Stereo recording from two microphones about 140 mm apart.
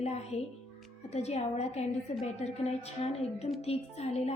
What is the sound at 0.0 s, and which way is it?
A woman's voice, 50° left (ahead or behind).